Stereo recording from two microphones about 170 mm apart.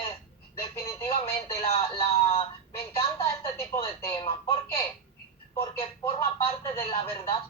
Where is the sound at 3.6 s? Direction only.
15° left (ahead or behind).